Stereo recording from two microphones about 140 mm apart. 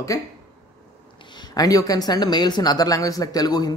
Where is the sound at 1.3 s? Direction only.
30° left (ahead or behind).